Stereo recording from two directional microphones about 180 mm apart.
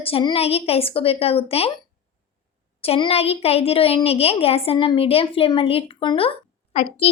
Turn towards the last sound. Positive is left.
turn(degrees=35)  # may be behind; listen again after turning